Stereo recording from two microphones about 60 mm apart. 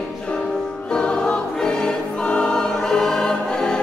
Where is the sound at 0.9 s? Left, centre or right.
Centre.